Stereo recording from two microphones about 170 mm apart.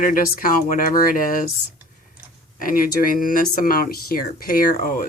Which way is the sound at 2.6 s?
55° left (ahead or behind).